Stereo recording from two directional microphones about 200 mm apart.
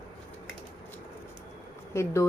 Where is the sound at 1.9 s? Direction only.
15° left (ahead or behind).